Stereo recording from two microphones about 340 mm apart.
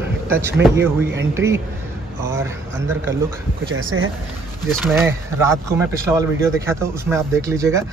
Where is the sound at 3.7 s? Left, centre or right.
Right.